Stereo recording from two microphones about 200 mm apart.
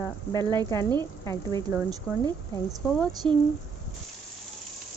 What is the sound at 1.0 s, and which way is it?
Speech, 15° left (ahead or behind).